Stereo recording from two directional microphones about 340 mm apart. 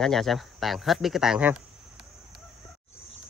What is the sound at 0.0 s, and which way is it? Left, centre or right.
Speech, centre.